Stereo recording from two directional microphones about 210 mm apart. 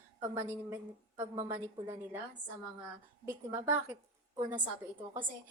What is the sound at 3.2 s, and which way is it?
Speech, 10° right (ahead or behind).